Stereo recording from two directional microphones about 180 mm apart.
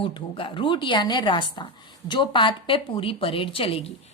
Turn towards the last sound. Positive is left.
turn(degrees=30)  # may be behind; listen again after turning